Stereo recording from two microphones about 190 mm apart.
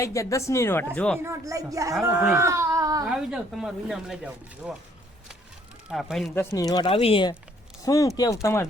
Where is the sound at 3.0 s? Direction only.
5° right (ahead or behind).